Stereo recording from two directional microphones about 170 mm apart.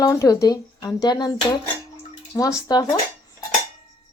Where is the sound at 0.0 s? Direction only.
20° left (ahead or behind).